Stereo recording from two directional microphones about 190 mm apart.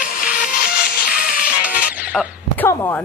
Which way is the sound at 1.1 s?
50° left (ahead or behind).